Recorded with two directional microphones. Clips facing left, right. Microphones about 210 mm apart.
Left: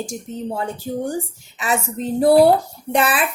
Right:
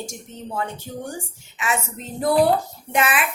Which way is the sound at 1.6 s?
35° left (ahead or behind).